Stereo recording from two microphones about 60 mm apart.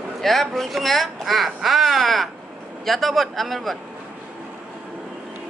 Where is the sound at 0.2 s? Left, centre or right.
Centre.